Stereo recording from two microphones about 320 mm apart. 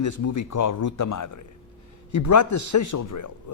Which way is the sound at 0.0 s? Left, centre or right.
Left.